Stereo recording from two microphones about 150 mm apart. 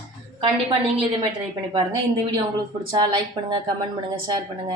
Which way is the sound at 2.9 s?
30° right (ahead or behind).